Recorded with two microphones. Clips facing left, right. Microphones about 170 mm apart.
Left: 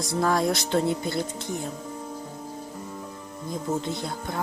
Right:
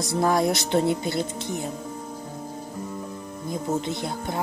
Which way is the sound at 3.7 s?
20° right (ahead or behind).